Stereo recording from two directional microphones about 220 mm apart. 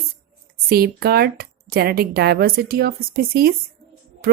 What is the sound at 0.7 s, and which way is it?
Speech, 45° right (ahead or behind).